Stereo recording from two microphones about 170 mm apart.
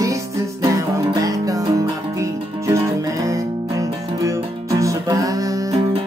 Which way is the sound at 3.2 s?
20° right (ahead or behind).